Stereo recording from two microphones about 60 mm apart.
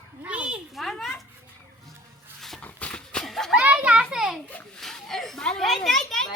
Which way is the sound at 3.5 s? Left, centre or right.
Centre.